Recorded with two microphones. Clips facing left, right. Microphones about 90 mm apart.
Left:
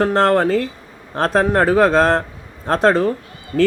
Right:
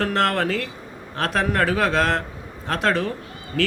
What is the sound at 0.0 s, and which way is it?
Speech, 35° left (ahead or behind).